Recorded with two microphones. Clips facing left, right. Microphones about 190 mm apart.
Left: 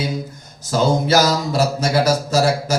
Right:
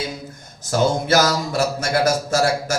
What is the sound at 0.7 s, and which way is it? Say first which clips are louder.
Speech: left 2 dB; 50° right (ahead or behind).